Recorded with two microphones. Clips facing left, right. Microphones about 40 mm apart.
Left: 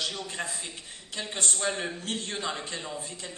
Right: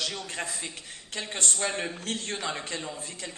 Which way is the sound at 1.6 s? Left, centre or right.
Right.